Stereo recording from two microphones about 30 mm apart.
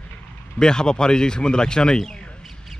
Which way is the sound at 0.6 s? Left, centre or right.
Left.